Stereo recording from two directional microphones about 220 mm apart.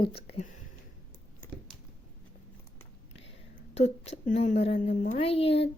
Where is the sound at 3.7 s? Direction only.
30° left (ahead or behind).